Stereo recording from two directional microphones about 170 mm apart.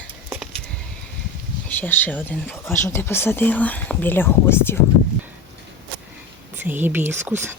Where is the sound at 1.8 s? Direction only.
10° left (ahead or behind).